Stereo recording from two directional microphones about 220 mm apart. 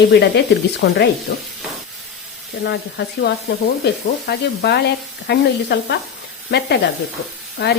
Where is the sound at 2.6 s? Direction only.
50° left (ahead or behind).